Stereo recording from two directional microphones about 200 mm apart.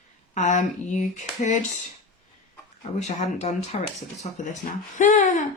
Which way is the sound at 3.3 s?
30° left (ahead or behind).